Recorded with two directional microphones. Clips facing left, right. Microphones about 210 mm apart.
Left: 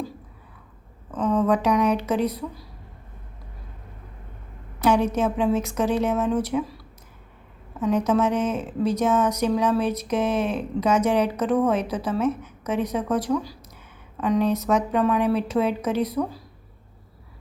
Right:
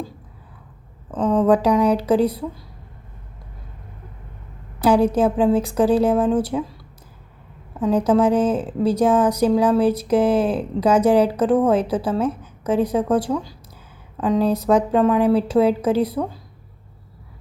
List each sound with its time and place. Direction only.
1.1 s speech: 30° right (ahead or behind)
4.8 s speech: 30° right (ahead or behind)
7.8 s speech: 30° right (ahead or behind)